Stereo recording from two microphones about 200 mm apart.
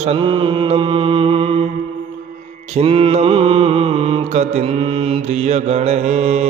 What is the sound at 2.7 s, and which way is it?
Mantra, 30° right (ahead or behind).